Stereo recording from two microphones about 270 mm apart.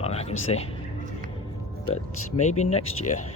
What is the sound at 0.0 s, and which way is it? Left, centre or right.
Speech, left.